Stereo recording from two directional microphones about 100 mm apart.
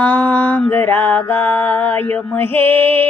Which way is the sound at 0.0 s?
15° left (ahead or behind).